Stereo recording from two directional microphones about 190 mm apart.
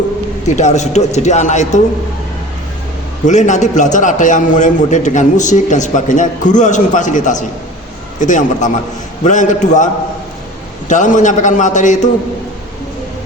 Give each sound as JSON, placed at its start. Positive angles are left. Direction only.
{"t": 0.4, "sound": "a man's voice", "side_deg": 40}
{"t": 3.2, "sound": "a man's voice", "side_deg": 40}